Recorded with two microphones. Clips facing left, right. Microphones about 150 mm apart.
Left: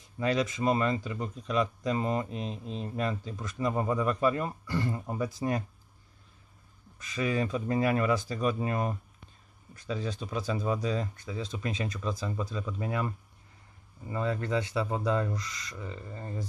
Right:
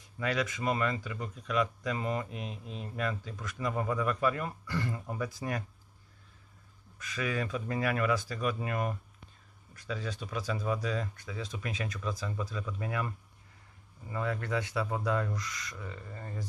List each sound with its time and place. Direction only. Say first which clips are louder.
0.2 s speech: left 4 dB; 25° left (ahead or behind)
7.0 s speech: left 4 dB; 25° left (ahead or behind)
14.1 s speech: left 3 dB; 25° left (ahead or behind)